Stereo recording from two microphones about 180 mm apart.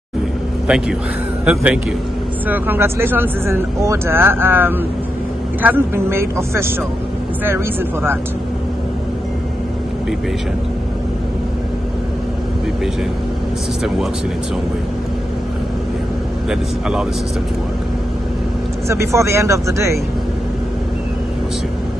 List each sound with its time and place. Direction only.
0.7 s a man's voice: 5° right (ahead or behind)
18.9 s speech: 15° right (ahead or behind)